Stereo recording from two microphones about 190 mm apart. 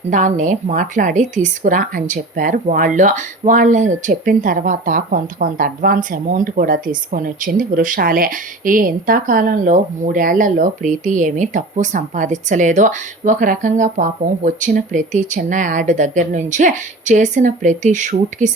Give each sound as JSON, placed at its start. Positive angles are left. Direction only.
{"t": 0.1, "sound": "speech", "side_deg": -40}